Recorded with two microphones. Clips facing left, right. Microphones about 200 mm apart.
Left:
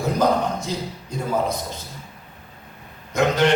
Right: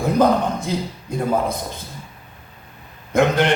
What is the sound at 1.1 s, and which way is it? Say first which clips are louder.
Speech: right 6 dB; 55° right (ahead or behind).